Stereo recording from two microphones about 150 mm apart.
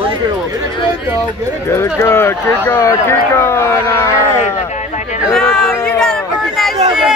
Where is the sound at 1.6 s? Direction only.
15° left (ahead or behind).